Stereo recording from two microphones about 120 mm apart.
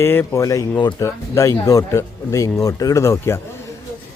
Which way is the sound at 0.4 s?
35° left (ahead or behind).